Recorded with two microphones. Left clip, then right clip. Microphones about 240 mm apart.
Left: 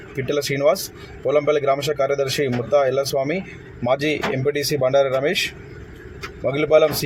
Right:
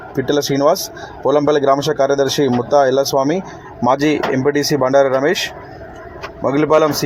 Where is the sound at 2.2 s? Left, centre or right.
Centre.